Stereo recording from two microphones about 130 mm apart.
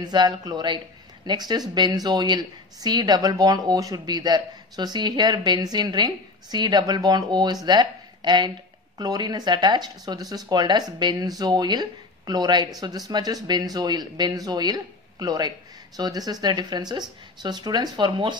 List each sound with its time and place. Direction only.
0.0 s speech: 35° right (ahead or behind)